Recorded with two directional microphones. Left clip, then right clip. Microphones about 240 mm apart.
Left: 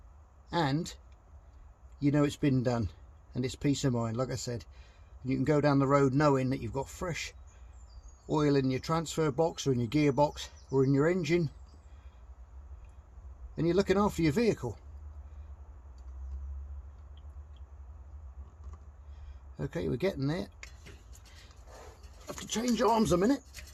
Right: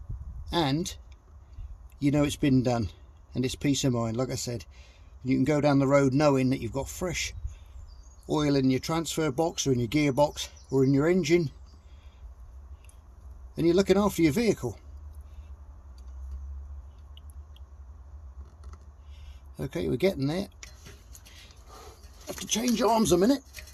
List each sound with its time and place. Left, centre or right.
0.5 s speech: right
2.0 s speech: right
8.3 s speech: right
13.6 s speech: right
19.5 s speech: right
22.3 s speech: right